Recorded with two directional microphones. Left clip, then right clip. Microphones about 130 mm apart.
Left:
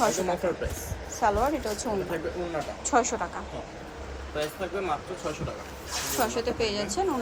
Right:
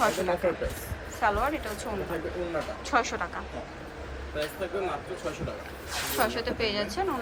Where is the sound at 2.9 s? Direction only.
30° left (ahead or behind).